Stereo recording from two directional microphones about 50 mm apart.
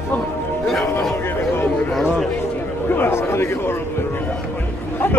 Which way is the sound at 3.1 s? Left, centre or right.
Left.